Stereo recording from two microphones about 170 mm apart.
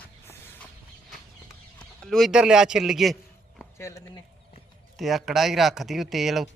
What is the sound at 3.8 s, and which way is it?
Speech, 15° left (ahead or behind).